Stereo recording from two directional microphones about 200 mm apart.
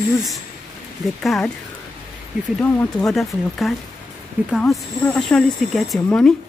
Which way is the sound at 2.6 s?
5° left (ahead or behind).